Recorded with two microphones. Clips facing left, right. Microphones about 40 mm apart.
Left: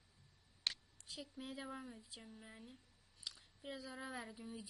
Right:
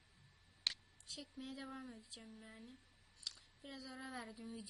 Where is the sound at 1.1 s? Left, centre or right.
Centre.